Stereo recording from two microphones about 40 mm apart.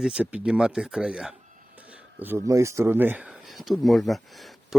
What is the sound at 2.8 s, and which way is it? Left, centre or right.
Speech, right.